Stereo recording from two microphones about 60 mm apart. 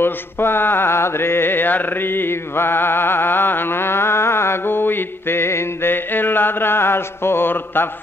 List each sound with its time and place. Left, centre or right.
0.0 s mantra: left